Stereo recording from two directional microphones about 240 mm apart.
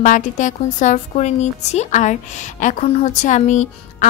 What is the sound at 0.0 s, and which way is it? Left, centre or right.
A woman's voice, left.